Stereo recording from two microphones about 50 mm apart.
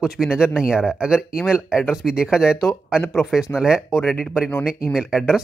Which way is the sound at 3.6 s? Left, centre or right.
Centre.